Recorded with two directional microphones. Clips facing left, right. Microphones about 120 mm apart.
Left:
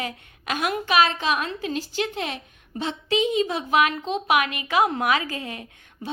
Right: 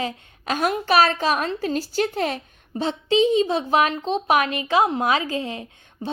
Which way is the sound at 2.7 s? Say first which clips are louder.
Right 4 dB; 30° right (ahead or behind).